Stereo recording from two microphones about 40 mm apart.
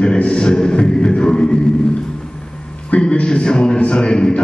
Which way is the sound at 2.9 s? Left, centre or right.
Left.